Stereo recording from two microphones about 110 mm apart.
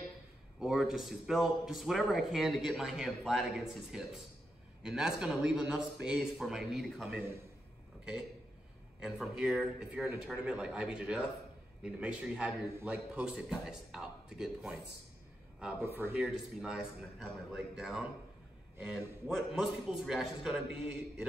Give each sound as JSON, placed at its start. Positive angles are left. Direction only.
{"t": 0.6, "sound": "a man's voice", "side_deg": -5}
{"t": 15.8, "sound": "speech", "side_deg": -20}
{"t": 16.2, "sound": "speech", "side_deg": -5}